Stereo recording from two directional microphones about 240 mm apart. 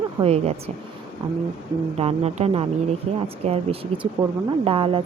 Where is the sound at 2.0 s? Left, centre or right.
Right.